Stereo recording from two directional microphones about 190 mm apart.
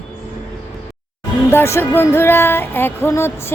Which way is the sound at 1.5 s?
10° left (ahead or behind).